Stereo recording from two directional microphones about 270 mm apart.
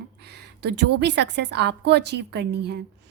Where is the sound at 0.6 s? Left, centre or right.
Right.